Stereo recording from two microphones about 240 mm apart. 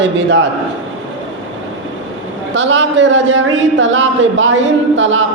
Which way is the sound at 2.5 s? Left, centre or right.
Right.